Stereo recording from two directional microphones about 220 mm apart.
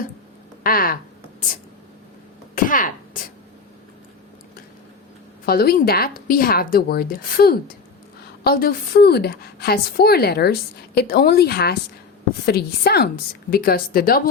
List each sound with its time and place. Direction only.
0.6 s speech: 40° left (ahead or behind)
2.6 s a sound: 40° left (ahead or behind)
5.5 s a woman's voice: 45° left (ahead or behind)